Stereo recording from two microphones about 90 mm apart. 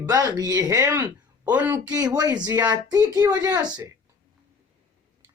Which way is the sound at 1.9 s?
45° right (ahead or behind).